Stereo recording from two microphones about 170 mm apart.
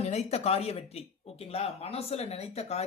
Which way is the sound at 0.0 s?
40° left (ahead or behind).